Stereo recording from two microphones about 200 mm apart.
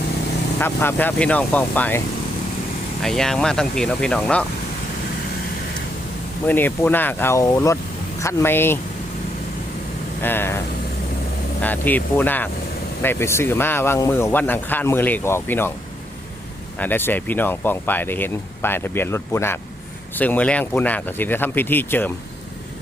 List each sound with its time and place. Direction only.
0.6 s speech: 10° left (ahead or behind)
3.0 s speech: centre (ahead or behind)
6.5 s speech: 10° left (ahead or behind)
10.2 s speech: 10° left (ahead or behind)
11.6 s speech: 10° left (ahead or behind)
16.7 s speech: 10° left (ahead or behind)